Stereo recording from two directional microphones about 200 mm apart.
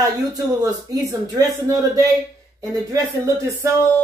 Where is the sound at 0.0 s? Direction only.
20° right (ahead or behind).